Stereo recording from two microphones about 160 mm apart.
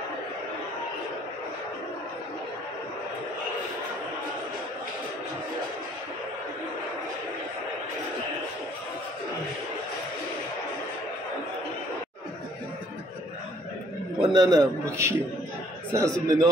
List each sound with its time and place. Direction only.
14.2 s a man's voice: 25° right (ahead or behind)